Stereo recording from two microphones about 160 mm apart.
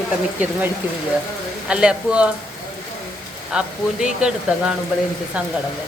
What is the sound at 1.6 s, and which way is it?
Speech, 5° right (ahead or behind).